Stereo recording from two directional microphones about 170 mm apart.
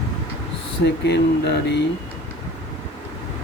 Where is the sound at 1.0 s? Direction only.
80° left.